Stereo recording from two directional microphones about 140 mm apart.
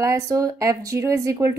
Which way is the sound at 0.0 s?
20° right (ahead or behind).